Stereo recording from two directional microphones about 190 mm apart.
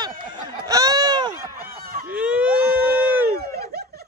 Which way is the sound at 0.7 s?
20° right (ahead or behind).